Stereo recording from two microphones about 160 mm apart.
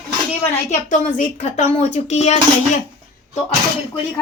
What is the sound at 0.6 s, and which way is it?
A woman's voice, 55° left (ahead or behind).